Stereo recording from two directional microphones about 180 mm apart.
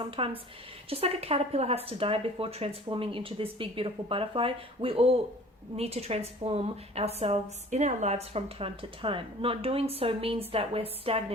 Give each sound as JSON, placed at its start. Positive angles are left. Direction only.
{"t": 0.2, "sound": "speech", "side_deg": -30}